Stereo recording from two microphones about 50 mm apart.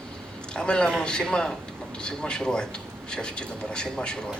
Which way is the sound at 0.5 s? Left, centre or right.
Centre.